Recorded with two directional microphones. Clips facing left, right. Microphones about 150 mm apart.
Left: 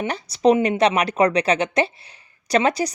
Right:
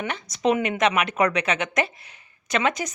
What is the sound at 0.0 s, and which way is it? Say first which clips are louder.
Speech: left 6 dB; 35° left (ahead or behind).